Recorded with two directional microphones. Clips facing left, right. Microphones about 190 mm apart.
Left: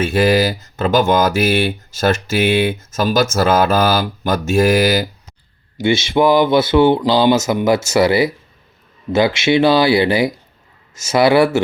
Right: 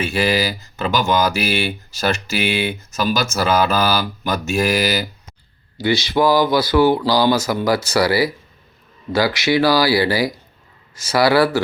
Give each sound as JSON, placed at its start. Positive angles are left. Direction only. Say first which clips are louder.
{"t": 0.0, "sound": "speech", "louder": "left 5 dB", "side_deg": 45}
{"t": 5.7, "sound": "speech", "louder": "left 3 dB", "side_deg": 25}